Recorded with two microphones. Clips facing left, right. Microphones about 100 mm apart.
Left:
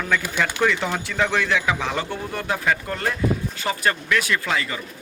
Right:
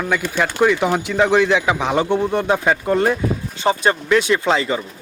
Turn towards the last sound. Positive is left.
turn(degrees=-25)  # may be behind; listen again after turning